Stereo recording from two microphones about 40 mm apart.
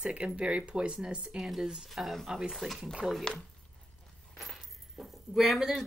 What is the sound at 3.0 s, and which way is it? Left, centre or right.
Speech, centre.